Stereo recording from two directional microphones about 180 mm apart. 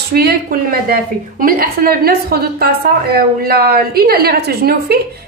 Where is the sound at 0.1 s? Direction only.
60° right (ahead or behind).